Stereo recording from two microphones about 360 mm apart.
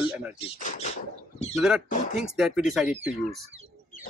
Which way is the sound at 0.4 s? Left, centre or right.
Centre.